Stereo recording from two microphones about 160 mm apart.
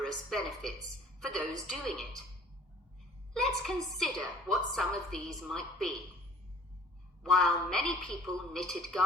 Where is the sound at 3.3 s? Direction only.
5° left (ahead or behind).